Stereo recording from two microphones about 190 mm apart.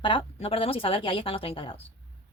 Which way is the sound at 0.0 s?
25° left (ahead or behind).